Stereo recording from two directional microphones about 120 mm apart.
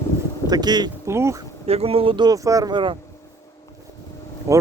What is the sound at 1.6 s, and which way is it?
Speech, 55° right (ahead or behind).